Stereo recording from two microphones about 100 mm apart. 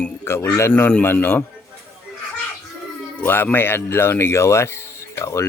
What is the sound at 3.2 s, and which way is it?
Speech, 20° left (ahead or behind).